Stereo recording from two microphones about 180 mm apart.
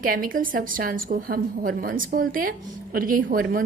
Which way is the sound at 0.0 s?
50° right (ahead or behind).